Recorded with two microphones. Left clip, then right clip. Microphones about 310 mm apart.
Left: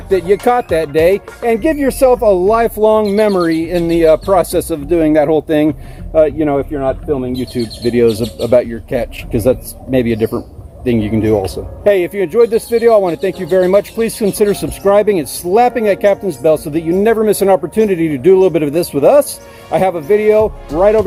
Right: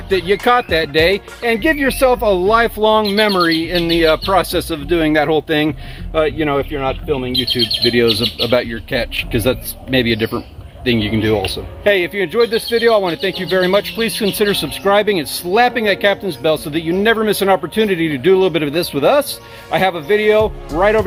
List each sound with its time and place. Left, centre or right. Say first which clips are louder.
0.4 s speech: left 1 dB; centre
14.5 s speech: even; centre
14.8 s speech: left 4 dB; centre